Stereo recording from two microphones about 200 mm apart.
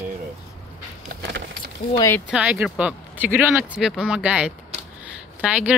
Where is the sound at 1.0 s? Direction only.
55° right (ahead or behind).